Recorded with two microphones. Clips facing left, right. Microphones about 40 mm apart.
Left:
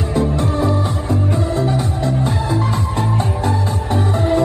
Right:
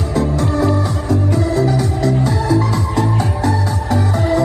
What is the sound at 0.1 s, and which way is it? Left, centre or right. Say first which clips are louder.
Music: right 1 dB; left.